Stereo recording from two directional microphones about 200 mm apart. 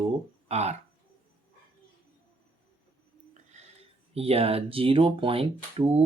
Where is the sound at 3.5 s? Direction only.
30° right (ahead or behind).